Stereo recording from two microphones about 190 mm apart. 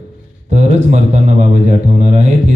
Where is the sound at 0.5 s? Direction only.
35° right (ahead or behind).